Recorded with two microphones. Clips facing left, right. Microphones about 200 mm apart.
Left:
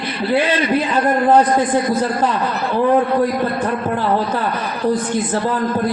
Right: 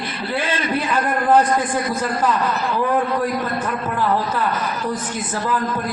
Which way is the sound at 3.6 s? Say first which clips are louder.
Left 3 dB; 35° left (ahead or behind).